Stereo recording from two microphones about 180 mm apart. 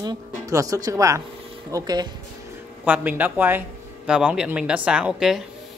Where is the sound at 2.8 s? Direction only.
10° right (ahead or behind).